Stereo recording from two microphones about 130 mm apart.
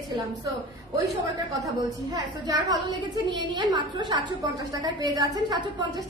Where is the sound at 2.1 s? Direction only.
30° right (ahead or behind).